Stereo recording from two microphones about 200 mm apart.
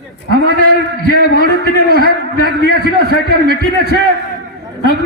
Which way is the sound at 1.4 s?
50° right (ahead or behind).